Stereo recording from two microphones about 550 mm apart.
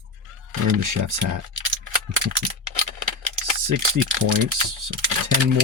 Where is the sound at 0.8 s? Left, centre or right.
Right.